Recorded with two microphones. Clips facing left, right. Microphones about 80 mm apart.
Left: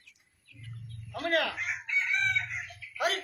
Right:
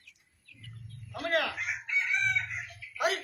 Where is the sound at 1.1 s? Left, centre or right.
Centre.